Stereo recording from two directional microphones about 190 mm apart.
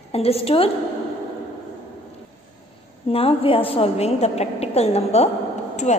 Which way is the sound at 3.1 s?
30° left (ahead or behind).